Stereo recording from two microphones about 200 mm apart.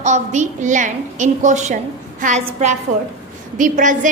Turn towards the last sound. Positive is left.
turn(degrees=-40)  # may be behind; listen again after turning